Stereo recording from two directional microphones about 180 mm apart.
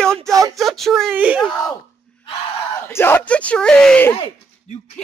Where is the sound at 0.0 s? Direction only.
5° left (ahead or behind).